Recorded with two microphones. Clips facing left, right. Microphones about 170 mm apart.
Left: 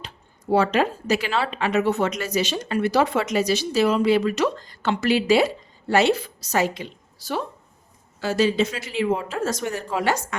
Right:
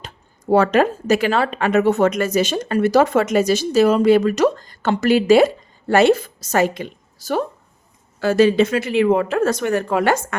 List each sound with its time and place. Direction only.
0.5 s a woman's voice: 50° right (ahead or behind)